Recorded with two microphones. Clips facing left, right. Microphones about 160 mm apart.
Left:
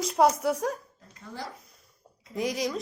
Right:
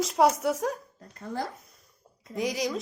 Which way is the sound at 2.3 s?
Centre (ahead or behind).